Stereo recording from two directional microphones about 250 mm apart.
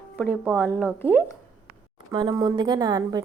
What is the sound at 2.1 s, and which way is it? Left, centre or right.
A woman's voice, centre.